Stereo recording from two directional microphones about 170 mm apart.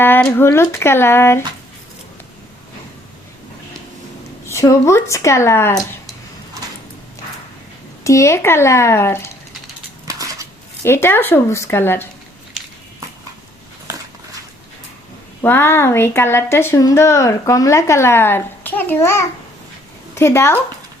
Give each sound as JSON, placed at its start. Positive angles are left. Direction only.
{"t": 0.0, "sound": "speech", "side_deg": 10}
{"t": 4.4, "sound": "speech", "side_deg": 20}
{"t": 8.0, "sound": "speech", "side_deg": 15}
{"t": 10.1, "sound": "dishes", "side_deg": -20}
{"t": 10.8, "sound": "speech", "side_deg": 15}
{"t": 15.4, "sound": "speech", "side_deg": 15}